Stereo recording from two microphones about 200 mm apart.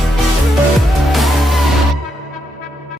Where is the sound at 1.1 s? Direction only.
Centre (ahead or behind).